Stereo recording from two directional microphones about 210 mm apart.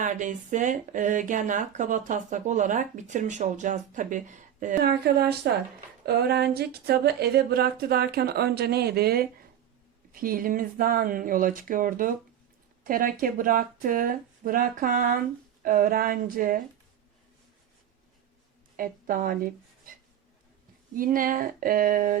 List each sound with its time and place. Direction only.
0.0 s speech: 35° right (ahead or behind)
18.8 s speech: 40° right (ahead or behind)